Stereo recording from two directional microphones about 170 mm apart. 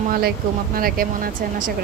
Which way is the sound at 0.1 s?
60° right (ahead or behind).